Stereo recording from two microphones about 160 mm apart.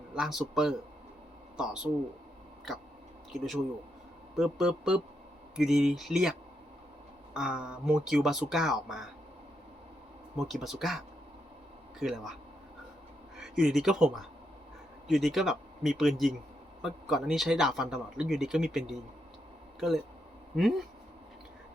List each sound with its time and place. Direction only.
0.2 s speech: 5° right (ahead or behind)
3.3 s speech: centre (ahead or behind)
7.3 s speech: 5° right (ahead or behind)
10.3 s speech: centre (ahead or behind)
13.3 s speech: 5° right (ahead or behind)
20.6 s speech: centre (ahead or behind)